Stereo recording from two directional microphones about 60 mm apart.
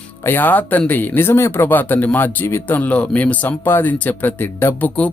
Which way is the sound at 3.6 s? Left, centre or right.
Left.